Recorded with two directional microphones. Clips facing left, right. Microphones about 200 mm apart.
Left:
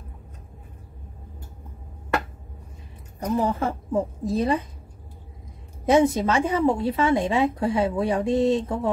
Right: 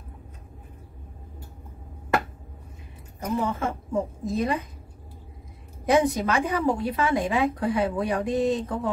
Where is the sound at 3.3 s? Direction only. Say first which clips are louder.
Left 3 dB; 35° left (ahead or behind).